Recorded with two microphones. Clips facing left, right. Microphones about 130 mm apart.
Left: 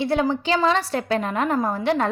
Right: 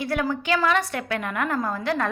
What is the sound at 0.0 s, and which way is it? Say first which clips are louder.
A woman's voice: left 4 dB; 25° left (ahead or behind).